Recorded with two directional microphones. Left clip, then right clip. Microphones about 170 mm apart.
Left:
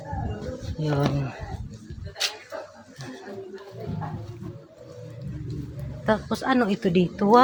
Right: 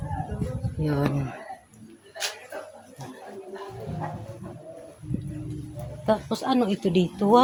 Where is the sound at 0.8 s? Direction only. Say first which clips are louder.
Left 1 dB; 15° right (ahead or behind).